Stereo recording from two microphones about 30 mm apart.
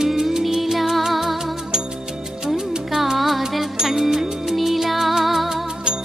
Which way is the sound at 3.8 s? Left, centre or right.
Centre.